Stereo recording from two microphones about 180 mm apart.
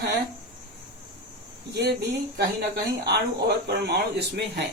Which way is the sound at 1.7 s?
65° right (ahead or behind).